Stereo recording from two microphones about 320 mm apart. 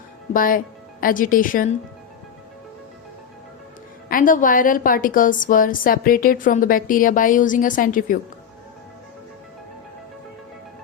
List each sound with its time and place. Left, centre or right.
0.3 s a woman's voice: left
4.1 s a woman's voice: left